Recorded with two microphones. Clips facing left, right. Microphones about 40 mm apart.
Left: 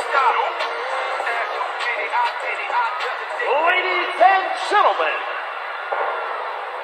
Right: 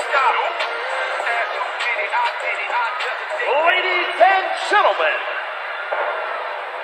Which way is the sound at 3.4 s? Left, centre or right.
Right.